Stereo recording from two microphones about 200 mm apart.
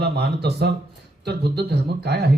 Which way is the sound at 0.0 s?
55° right (ahead or behind).